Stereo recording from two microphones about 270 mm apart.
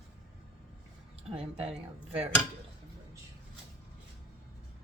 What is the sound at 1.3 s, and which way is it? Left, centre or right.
Speech, right.